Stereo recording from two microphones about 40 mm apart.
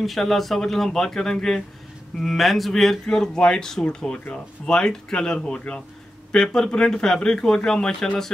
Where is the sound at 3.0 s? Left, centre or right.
Centre.